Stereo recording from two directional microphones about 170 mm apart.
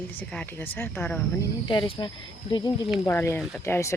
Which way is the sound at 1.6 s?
25° left (ahead or behind).